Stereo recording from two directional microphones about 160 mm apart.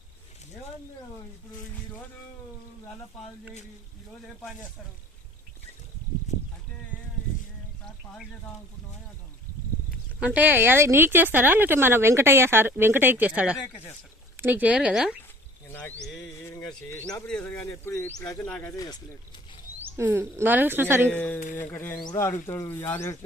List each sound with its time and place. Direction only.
10.2 s speech: 10° right (ahead or behind)
15.7 s speech: 10° left (ahead or behind)
17.2 s speech: 10° left (ahead or behind)
19.8 s speech: 15° right (ahead or behind)
21.1 s speech: 10° left (ahead or behind)
22.0 s speech: 25° left (ahead or behind)